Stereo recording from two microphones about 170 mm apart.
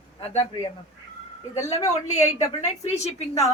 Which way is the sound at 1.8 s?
40° left (ahead or behind).